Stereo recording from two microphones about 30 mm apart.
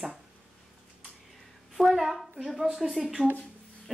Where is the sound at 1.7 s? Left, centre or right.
Centre.